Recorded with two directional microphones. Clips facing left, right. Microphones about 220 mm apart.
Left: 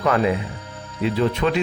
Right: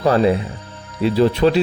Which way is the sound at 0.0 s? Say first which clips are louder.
Right 4 dB; 35° right (ahead or behind).